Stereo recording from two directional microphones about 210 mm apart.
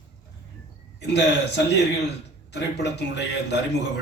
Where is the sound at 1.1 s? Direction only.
55° left (ahead or behind).